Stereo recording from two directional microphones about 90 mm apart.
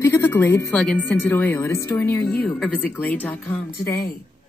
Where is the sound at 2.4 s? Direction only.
15° left (ahead or behind).